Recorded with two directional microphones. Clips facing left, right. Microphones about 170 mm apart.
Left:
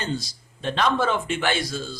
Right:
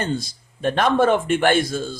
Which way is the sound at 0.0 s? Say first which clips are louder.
Right 4 dB; 55° right (ahead or behind).